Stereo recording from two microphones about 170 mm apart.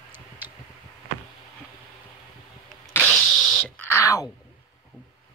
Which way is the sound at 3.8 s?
15° left (ahead or behind).